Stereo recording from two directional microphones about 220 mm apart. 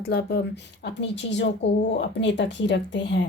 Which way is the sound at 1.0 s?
55° left (ahead or behind).